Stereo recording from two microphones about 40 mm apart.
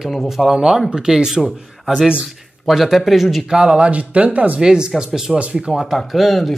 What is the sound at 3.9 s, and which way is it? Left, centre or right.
Speech, right.